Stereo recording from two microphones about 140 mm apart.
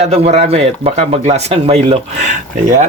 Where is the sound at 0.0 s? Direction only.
50° right (ahead or behind).